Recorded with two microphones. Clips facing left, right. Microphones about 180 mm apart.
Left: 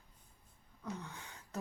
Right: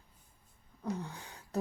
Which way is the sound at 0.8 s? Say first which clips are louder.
Right 6 dB; 35° right (ahead or behind).